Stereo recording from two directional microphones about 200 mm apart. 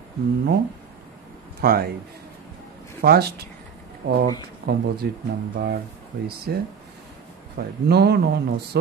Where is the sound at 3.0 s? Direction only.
50° right (ahead or behind).